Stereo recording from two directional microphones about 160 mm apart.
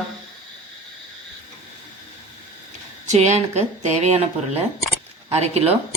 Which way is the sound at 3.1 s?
45° right (ahead or behind).